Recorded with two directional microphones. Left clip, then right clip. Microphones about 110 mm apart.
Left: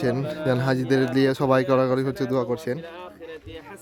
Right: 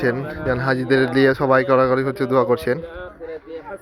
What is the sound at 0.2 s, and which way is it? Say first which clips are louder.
Speech: right 2 dB; 90° left.